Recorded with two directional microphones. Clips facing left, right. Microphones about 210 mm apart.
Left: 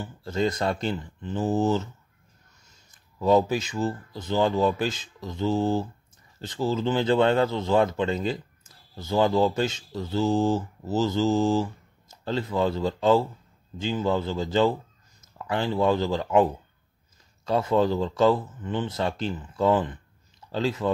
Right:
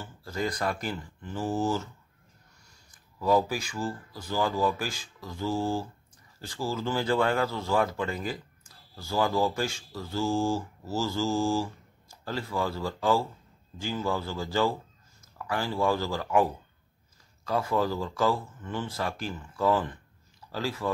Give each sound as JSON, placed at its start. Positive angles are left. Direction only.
{"t": 0.0, "sound": "speech", "side_deg": 25}